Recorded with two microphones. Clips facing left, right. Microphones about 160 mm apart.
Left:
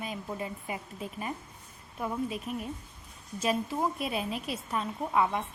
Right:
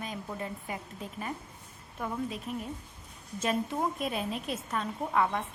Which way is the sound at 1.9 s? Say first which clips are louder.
Left 2 dB; 10° left (ahead or behind).